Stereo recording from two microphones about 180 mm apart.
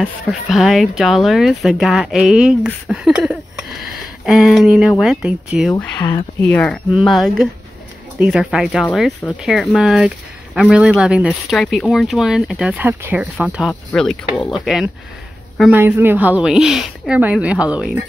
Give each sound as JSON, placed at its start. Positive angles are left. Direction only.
{"t": 0.0, "sound": "speech", "side_deg": 0}
{"t": 5.9, "sound": "speech", "side_deg": 20}
{"t": 6.5, "sound": "speech", "side_deg": 10}
{"t": 6.9, "sound": "speech", "side_deg": 0}